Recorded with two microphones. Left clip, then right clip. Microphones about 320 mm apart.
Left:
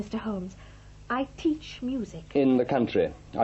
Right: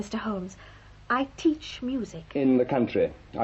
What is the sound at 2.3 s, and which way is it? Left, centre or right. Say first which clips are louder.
Speech: even; left.